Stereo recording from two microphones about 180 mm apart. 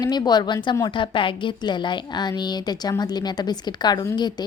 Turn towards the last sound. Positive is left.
turn(degrees=25)  # may be behind; listen again after turning